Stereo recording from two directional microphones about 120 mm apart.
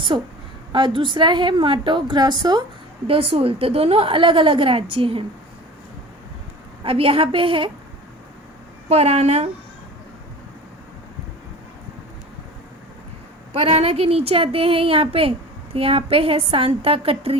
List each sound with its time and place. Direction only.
0.1 s a woman's voice: 45° right (ahead or behind)
3.1 s a woman's voice: 55° right (ahead or behind)
6.8 s a woman's voice: 50° right (ahead or behind)
8.9 s a woman's voice: 60° right (ahead or behind)
13.5 s a woman's voice: 60° right (ahead or behind)